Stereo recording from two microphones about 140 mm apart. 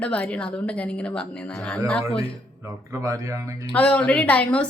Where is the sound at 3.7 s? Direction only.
10° left (ahead or behind).